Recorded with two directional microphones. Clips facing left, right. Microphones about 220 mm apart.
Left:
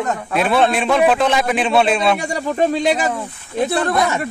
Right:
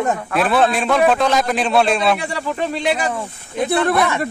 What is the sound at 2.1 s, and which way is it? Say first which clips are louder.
Speech: left 4 dB; 40° left (ahead or behind).